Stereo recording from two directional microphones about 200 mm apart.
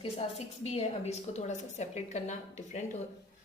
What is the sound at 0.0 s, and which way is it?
A woman's voice, 30° left (ahead or behind).